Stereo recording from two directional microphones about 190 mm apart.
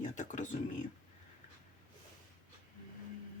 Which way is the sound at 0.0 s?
40° left (ahead or behind).